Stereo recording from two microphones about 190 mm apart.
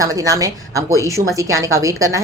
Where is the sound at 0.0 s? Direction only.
20° right (ahead or behind).